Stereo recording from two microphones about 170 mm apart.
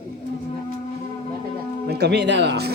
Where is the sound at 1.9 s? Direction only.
75° right (ahead or behind).